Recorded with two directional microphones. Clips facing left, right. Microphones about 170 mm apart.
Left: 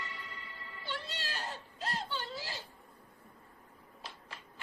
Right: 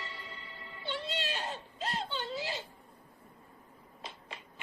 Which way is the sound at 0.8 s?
20° right (ahead or behind).